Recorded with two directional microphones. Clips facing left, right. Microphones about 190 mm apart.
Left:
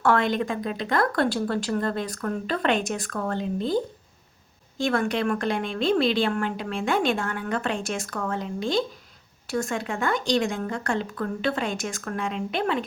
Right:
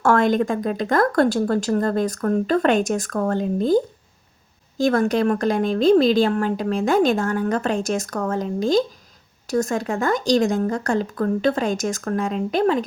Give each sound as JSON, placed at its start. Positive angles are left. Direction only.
{"t": 0.0, "sound": "speech", "side_deg": -45}